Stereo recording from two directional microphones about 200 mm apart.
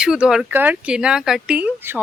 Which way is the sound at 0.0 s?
5° right (ahead or behind).